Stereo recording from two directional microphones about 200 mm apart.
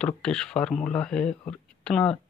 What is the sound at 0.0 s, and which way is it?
Speech, 5° left (ahead or behind).